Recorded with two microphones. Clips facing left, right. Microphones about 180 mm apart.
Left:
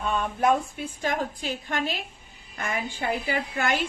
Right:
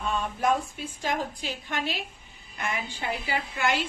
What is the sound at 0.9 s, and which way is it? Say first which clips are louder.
A woman's voice: left 2 dB; 50° left (ahead or behind).